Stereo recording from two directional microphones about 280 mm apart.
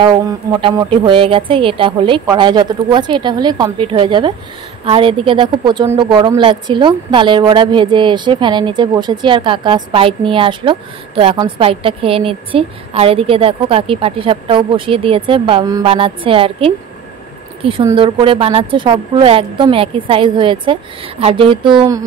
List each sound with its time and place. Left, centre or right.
0.0 s a woman's voice: centre